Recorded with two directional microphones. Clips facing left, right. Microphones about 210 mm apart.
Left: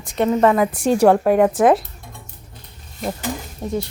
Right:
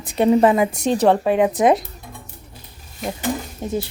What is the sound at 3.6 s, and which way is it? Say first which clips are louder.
Speech: left 1 dB; centre (ahead or behind).